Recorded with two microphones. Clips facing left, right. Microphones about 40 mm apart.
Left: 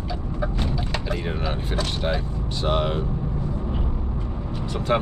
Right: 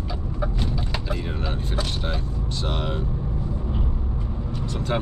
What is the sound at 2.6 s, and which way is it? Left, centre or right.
Speech, centre.